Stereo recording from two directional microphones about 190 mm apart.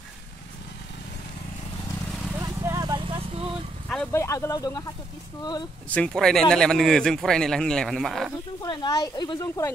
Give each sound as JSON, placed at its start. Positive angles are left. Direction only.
{"t": 2.4, "sound": "vehicle", "side_deg": -20}
{"t": 3.9, "sound": "speech", "side_deg": 10}
{"t": 5.9, "sound": "a man's voice", "side_deg": 5}
{"t": 8.5, "sound": "speech", "side_deg": 20}